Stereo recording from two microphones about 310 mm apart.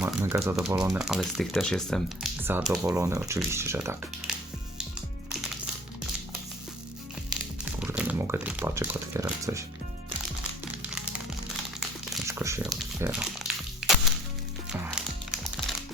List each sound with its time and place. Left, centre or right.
0.0 s speech: centre
7.6 s speech: centre
11.8 s crumpling: centre
14.7 s music: centre